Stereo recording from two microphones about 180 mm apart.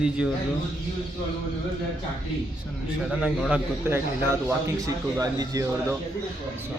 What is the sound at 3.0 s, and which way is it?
A man's voice, 5° right (ahead or behind).